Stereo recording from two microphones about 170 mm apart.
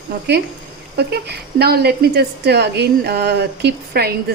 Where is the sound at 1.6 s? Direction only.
70° right (ahead or behind).